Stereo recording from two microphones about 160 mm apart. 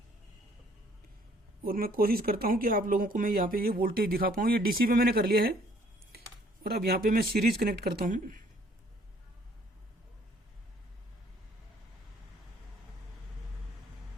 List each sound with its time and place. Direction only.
1.6 s speech: 65° right (ahead or behind)
6.1 s computer keyboard: 75° right (ahead or behind)
7.9 s speech: 55° right (ahead or behind)